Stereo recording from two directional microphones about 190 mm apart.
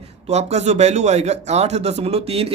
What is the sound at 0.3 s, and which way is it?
Speech, 35° right (ahead or behind).